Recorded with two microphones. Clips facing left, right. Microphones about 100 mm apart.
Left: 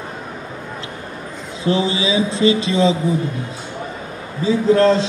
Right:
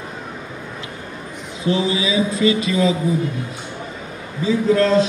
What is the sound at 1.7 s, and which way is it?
Speech, 30° left (ahead or behind).